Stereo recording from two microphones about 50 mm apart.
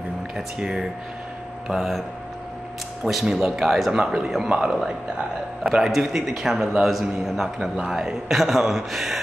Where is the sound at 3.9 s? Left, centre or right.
Centre.